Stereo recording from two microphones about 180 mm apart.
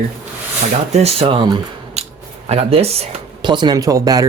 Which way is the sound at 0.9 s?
35° right (ahead or behind).